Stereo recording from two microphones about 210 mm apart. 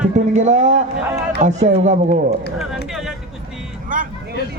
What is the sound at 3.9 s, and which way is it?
Vehicle, 40° right (ahead or behind).